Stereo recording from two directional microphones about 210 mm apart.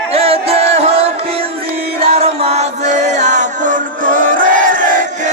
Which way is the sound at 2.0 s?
30° right (ahead or behind).